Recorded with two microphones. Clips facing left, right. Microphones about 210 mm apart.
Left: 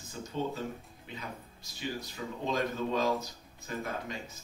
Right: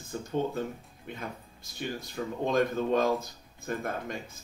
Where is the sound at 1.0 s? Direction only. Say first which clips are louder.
Right 4 dB; 55° right (ahead or behind).